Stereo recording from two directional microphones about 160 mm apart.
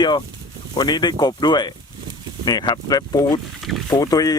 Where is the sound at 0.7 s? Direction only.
25° left (ahead or behind).